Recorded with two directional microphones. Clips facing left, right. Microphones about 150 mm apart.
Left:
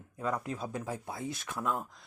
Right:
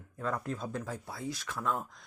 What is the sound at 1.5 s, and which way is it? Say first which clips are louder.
Speech: left 1 dB; 5° left (ahead or behind).